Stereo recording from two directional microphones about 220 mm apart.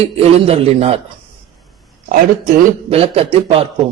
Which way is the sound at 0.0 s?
25° right (ahead or behind).